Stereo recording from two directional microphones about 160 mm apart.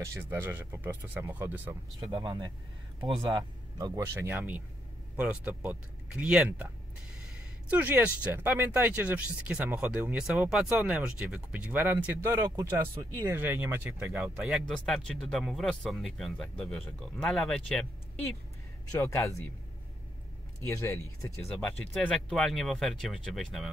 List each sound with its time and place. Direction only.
0.0 s speech: 15° right (ahead or behind)
2.1 s speech: 25° right (ahead or behind); by 6.7 s 5° right (ahead or behind)
7.7 s speech: 10° right (ahead or behind)
18.9 s speech: 20° left (ahead or behind)
20.6 s speech: 15° left (ahead or behind)
21.5 s speech: 5° left (ahead or behind)